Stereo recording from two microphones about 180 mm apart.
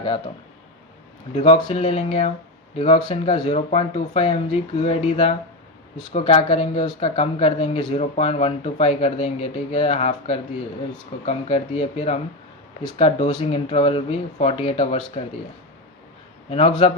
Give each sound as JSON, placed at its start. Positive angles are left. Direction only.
{"t": 1.4, "sound": "speech", "side_deg": 30}
{"t": 3.4, "sound": "speech", "side_deg": 35}
{"t": 16.5, "sound": "speech", "side_deg": 35}